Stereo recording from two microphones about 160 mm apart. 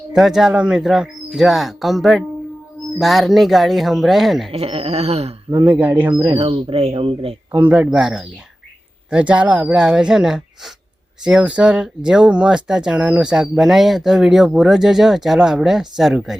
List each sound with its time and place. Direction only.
0.1 s speech: centre (ahead or behind)
4.5 s speech: 40° right (ahead or behind)
5.8 s speech: 10° right (ahead or behind)
6.2 s speech: 30° right (ahead or behind)
7.5 s speech: 10° right (ahead or behind)